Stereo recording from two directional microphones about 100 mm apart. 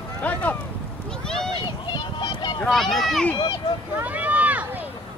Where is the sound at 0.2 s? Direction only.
15° left (ahead or behind).